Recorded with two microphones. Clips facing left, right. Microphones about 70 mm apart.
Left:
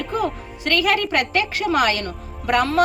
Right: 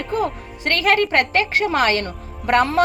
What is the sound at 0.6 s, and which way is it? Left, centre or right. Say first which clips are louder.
A woman's voice: right 2 dB; right.